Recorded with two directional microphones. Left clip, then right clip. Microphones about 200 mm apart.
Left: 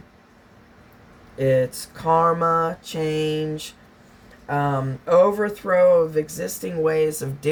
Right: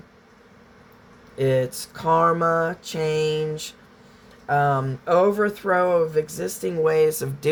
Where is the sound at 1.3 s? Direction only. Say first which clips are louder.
Left 2 dB; 50° right (ahead or behind).